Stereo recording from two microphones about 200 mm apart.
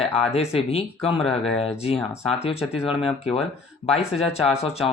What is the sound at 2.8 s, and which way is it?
Speech, 30° left (ahead or behind).